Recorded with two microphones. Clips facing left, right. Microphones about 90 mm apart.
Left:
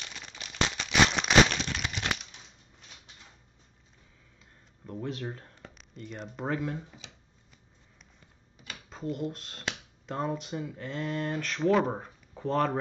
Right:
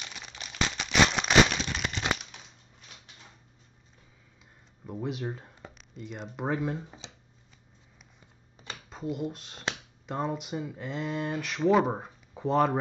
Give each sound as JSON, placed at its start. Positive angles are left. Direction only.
{"t": 0.0, "sound": "a sound", "side_deg": -5}
{"t": 4.8, "sound": "speech", "side_deg": -10}
{"t": 7.0, "sound": "shuffling cards", "side_deg": -25}
{"t": 8.8, "sound": "speech", "side_deg": -5}